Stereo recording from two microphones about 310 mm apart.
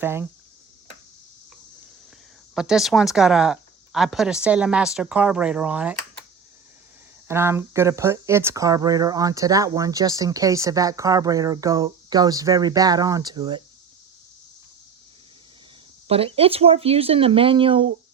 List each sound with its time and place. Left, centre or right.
0.0 s speech: centre
2.6 s speech: centre
7.3 s speech: centre
16.0 s speech: centre